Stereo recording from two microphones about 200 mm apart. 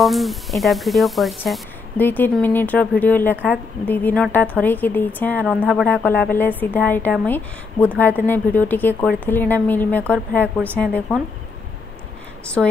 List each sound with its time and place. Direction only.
0.0 s a woman's voice: centre (ahead or behind)
5.4 s speech: 5° right (ahead or behind)
5.7 s a woman's voice: 5° left (ahead or behind)